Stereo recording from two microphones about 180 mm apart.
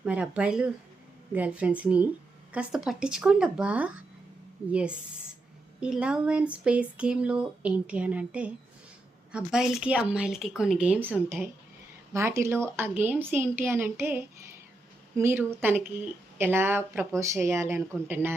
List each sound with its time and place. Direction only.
0.0 s speech: 5° right (ahead or behind)